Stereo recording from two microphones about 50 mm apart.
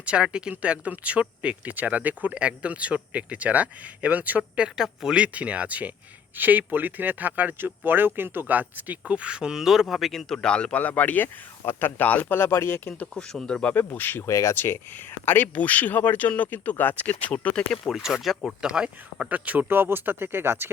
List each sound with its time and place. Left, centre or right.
0.0 s speech: right
4.6 s speech: centre
5.2 s a man's voice: right; by 10.5 s centre
10.5 s speech: centre
10.8 s speech: left
11.6 s speech: left
12.3 s speech: left
13.1 s a man's voice: centre
13.7 s speech: left
14.5 s speech: left
15.2 s speech: left
17.9 s speech: centre
18.6 s speech: centre
19.3 s speech: right